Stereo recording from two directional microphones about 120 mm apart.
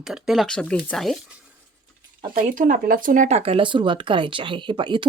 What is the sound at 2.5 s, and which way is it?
Speech, 90° right.